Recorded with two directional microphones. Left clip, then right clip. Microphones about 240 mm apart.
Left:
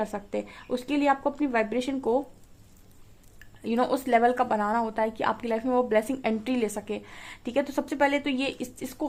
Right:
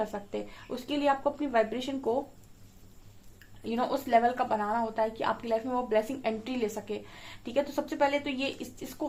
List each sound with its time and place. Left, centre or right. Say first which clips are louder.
0.0 s a woman's voice: left 3 dB; left
3.6 s a woman's voice: left 4 dB; left